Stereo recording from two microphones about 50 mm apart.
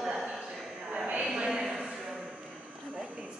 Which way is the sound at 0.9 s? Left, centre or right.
Right.